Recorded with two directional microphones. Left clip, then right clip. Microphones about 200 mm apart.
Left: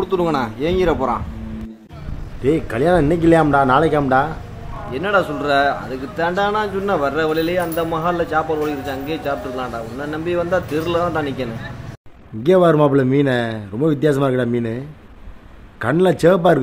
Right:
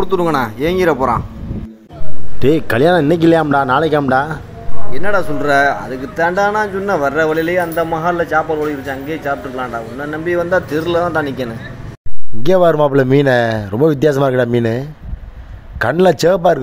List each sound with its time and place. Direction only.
0.0 s speech: 15° right (ahead or behind)
2.4 s a man's voice: 45° right (ahead or behind)
4.9 s a man's voice: 20° right (ahead or behind)
12.4 s a man's voice: 35° right (ahead or behind)